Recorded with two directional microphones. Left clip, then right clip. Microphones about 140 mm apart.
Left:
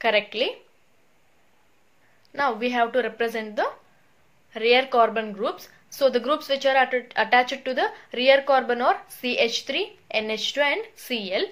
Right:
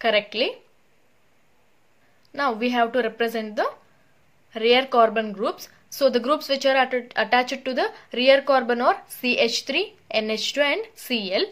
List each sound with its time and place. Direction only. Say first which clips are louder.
0.0 s a woman's voice: right 1 dB; 35° right (ahead or behind)
2.3 s a woman's voice: right 1 dB; 40° right (ahead or behind)